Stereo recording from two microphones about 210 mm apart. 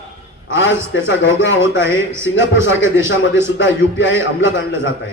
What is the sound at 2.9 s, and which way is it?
A man's voice, 60° left (ahead or behind).